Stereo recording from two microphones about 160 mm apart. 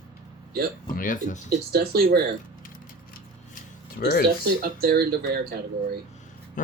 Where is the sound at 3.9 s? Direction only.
75° left (ahead or behind).